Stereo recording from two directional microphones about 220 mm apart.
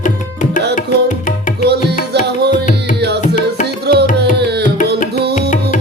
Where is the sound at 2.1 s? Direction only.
50° right (ahead or behind).